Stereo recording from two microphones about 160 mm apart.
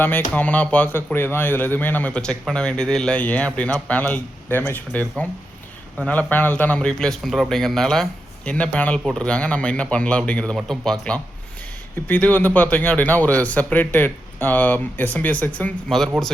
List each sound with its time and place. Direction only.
0.0 s a man's voice: 10° left (ahead or behind)